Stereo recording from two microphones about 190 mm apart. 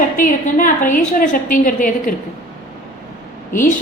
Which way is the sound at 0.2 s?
45° left (ahead or behind).